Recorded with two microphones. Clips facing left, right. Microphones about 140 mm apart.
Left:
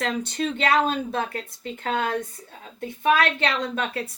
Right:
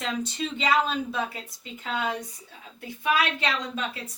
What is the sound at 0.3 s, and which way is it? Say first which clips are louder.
A woman's voice: left 3 dB; 50° left (ahead or behind).